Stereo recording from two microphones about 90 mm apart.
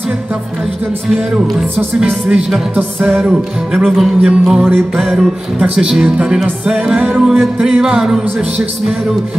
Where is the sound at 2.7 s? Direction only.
20° right (ahead or behind).